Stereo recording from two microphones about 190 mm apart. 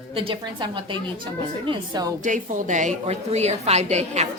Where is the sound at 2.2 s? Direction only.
40° right (ahead or behind).